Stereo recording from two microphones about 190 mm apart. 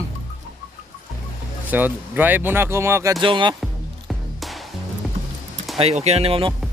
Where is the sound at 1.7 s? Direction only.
10° right (ahead or behind); by 3.5 s 25° right (ahead or behind).